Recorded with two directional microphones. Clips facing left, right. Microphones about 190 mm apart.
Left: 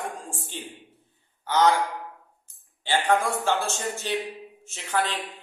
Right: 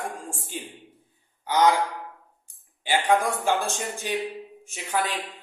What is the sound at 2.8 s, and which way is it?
A man's voice, 15° right (ahead or behind).